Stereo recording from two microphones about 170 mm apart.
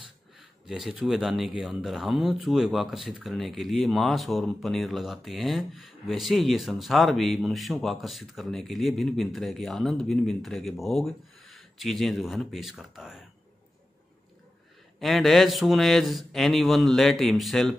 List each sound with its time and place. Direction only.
0.4 s speech: centre (ahead or behind)
15.0 s speech: centre (ahead or behind)